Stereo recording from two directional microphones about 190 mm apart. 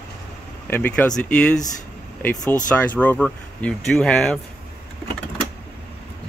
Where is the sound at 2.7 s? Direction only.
5° left (ahead or behind).